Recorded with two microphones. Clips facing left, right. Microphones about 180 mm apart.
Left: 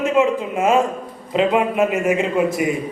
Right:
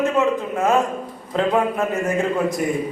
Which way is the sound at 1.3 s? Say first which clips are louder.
Left 3 dB; 10° left (ahead or behind).